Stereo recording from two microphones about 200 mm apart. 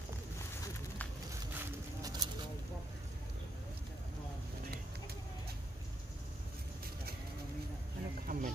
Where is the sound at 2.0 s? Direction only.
20° right (ahead or behind).